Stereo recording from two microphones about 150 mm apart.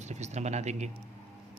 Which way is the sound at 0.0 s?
50° right (ahead or behind).